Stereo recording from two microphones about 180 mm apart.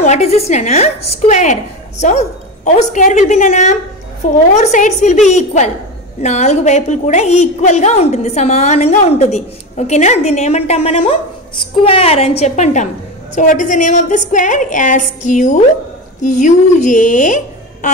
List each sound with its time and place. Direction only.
0.0 s a woman's voice: 40° left (ahead or behind)